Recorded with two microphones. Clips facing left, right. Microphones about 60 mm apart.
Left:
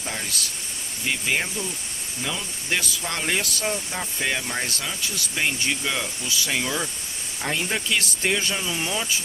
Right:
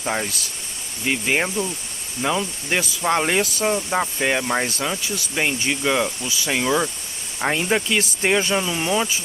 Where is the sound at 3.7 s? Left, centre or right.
Right.